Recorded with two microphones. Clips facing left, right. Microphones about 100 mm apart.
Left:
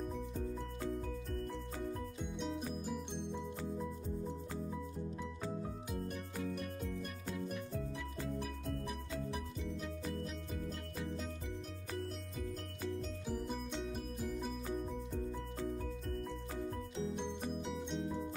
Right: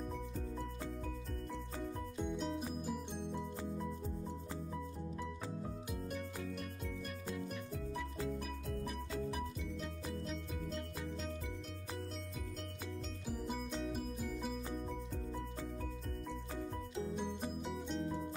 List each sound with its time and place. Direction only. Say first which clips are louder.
2.3 s music: left 2 dB; centre (ahead or behind)
17.2 s music: even; 5° right (ahead or behind)